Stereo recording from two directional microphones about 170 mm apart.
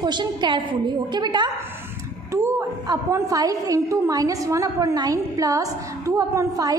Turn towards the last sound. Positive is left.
turn(degrees=-20)  # may be behind; listen again after turning